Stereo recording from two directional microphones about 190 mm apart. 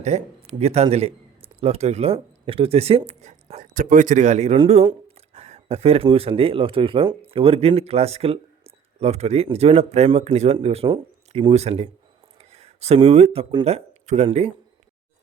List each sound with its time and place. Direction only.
0.1 s a man's voice: 35° right (ahead or behind)